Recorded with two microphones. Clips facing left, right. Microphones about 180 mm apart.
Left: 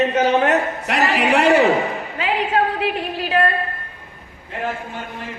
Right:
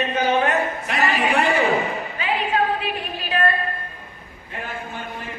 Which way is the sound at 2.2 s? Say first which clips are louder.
Left 3 dB; 75° left (ahead or behind).